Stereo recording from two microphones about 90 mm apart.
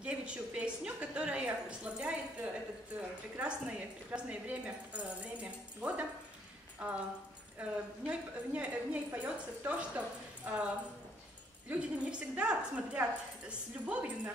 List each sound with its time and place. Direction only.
0.0 s a woman's voice: 10° right (ahead or behind)
11.7 s a woman's voice: 15° right (ahead or behind)